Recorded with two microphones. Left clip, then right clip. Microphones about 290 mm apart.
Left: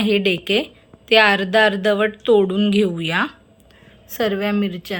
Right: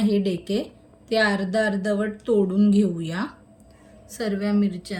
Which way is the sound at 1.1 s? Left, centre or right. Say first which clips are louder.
Left 8 dB; centre.